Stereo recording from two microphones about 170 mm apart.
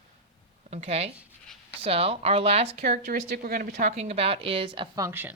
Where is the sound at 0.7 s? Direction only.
40° right (ahead or behind).